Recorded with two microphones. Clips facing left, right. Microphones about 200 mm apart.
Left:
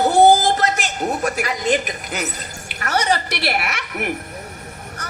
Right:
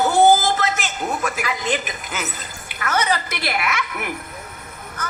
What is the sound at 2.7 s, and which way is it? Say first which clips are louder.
Speech: left 1 dB; 40° left (ahead or behind).